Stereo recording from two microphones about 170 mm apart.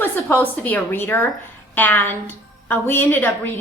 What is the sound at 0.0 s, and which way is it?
A woman's voice, 10° left (ahead or behind).